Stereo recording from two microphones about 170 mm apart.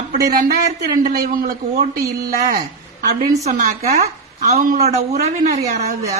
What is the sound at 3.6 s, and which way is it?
A man's voice, 45° right (ahead or behind).